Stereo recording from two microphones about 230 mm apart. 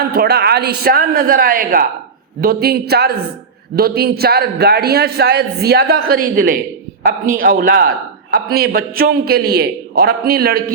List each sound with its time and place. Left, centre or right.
0.0 s a man's voice: right